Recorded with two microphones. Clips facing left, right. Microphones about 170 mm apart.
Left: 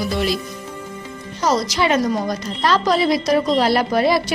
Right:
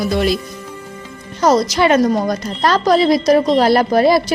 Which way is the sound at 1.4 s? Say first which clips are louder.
Right 6 dB; 50° right (ahead or behind).